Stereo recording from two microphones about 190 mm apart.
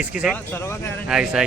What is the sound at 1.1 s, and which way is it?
Speech, 5° right (ahead or behind).